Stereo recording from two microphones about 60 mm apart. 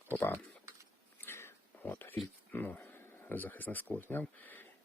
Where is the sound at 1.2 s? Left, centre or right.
Left.